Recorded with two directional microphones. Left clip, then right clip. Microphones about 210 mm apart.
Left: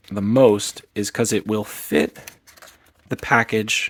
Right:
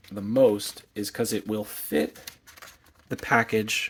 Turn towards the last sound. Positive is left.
turn(degrees=25)  # may be behind; listen again after turning